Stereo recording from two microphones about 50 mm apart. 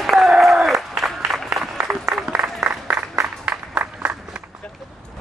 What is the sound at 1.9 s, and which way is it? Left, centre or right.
Applause, right.